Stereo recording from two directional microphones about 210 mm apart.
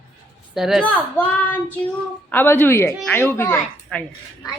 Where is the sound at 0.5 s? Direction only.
Centre (ahead or behind).